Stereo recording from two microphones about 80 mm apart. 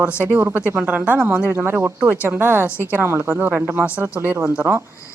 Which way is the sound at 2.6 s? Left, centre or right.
Left.